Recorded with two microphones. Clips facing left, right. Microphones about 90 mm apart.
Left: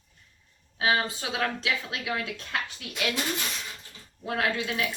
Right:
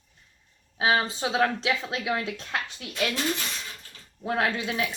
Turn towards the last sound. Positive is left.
turn(degrees=-30)  # may be behind; listen again after turning